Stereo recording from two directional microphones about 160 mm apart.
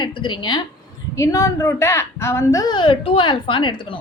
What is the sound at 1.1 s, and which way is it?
A woman's voice, 20° left (ahead or behind).